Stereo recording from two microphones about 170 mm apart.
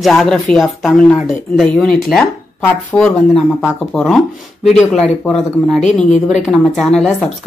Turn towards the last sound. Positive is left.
turn(degrees=5)  # may be behind; listen again after turning